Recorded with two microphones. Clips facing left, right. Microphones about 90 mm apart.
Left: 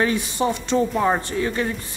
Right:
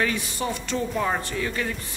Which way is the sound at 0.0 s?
30° left (ahead or behind).